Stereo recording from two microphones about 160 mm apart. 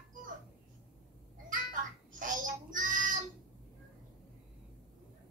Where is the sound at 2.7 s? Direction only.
55° right (ahead or behind).